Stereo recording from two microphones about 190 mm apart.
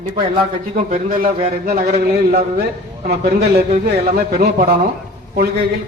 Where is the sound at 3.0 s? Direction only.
55° right (ahead or behind).